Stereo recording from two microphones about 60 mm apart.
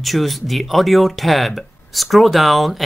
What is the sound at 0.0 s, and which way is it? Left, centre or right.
A man's voice, centre.